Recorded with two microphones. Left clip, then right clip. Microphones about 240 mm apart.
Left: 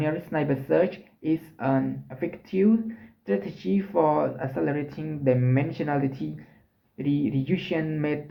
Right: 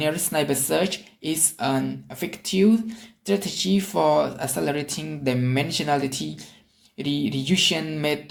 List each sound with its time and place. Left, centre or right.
0.0 s speech: right